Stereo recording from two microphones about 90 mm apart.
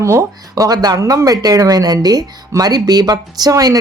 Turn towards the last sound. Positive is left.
turn(degrees=-45)  # may be behind; listen again after turning